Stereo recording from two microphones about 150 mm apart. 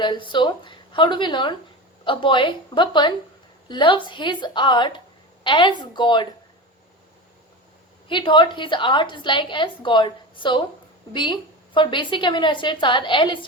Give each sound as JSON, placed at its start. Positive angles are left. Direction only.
{"t": 0.0, "sound": "a woman's voice", "side_deg": 30}
{"t": 8.0, "sound": "a woman's voice", "side_deg": 35}